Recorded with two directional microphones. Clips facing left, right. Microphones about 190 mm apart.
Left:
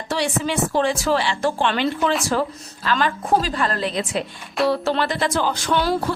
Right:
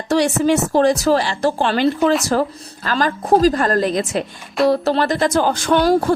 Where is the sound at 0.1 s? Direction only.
45° right (ahead or behind).